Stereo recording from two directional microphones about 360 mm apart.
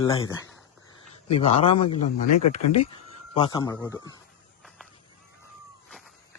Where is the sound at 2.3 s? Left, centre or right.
Left.